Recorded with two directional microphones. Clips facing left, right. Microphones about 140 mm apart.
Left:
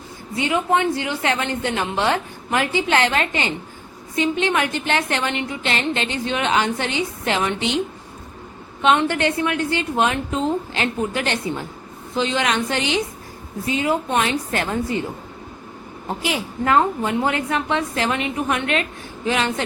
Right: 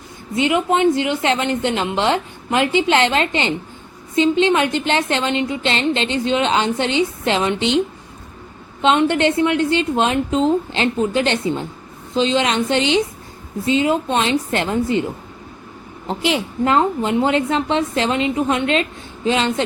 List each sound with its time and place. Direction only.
0.3 s a woman's voice: 20° right (ahead or behind)
8.8 s a woman's voice: 20° right (ahead or behind)
16.0 s a woman's voice: 25° right (ahead or behind)